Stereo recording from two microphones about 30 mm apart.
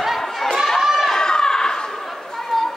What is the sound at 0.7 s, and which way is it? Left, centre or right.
Chatter, centre.